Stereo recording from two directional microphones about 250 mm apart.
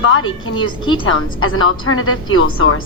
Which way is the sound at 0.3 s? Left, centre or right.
Left.